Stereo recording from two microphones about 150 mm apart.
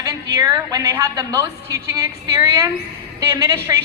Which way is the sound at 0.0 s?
20° right (ahead or behind).